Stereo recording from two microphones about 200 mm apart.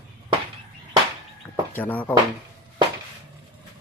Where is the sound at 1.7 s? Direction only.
10° left (ahead or behind).